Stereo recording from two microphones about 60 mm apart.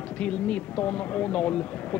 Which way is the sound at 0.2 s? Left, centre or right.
Centre.